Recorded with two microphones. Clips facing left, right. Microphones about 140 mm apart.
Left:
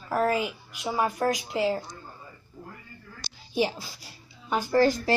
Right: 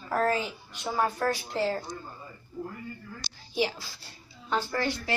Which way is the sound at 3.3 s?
20° left (ahead or behind).